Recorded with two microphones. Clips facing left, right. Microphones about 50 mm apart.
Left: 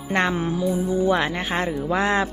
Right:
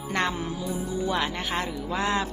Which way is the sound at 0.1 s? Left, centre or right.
Left.